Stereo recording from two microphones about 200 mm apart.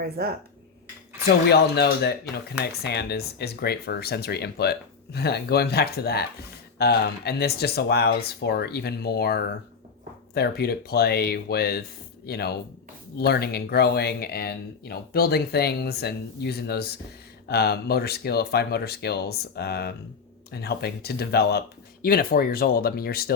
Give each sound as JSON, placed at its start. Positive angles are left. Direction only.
{"t": 0.0, "sound": "speech", "side_deg": -50}
{"t": 1.5, "sound": "speech", "side_deg": 55}